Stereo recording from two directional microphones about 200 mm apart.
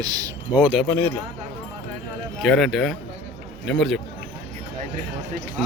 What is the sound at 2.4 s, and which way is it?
Speech, centre (ahead or behind).